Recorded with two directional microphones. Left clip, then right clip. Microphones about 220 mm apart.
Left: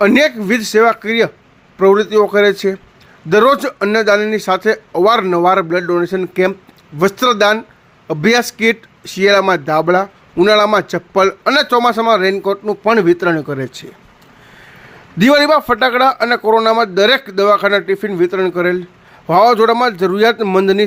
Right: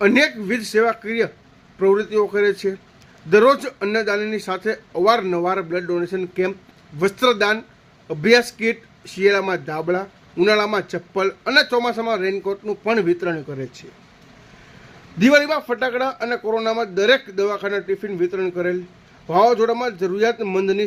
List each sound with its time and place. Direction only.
0.0 s speech: 10° left (ahead or behind)
15.2 s a man's voice: 20° left (ahead or behind)